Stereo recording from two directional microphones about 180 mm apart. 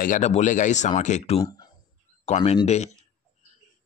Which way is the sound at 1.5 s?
20° left (ahead or behind).